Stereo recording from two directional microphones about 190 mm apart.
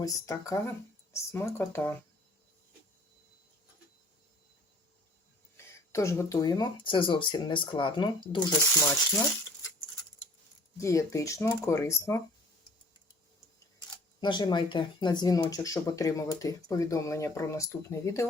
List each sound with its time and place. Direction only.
0.0 s speech: 15° left (ahead or behind)
5.5 s speech: 15° left (ahead or behind)
10.8 s speech: 15° left (ahead or behind)
14.2 s speech: 25° left (ahead or behind)